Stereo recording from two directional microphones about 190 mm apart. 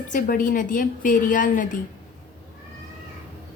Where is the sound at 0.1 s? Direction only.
45° left (ahead or behind).